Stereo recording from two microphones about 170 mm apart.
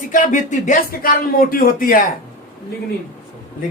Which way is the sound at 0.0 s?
50° left (ahead or behind).